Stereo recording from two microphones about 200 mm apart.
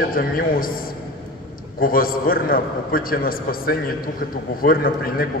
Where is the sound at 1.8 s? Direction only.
45° left (ahead or behind).